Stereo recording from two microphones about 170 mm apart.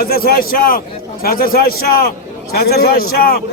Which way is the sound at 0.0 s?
60° left (ahead or behind).